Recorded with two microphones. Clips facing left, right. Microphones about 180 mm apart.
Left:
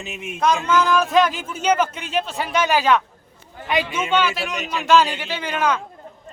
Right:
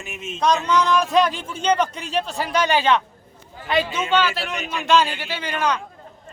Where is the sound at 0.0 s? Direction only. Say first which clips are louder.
Left 1 dB; 15° left (ahead or behind).